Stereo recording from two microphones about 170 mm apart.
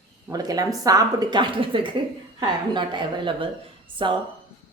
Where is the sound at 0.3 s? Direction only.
20° right (ahead or behind).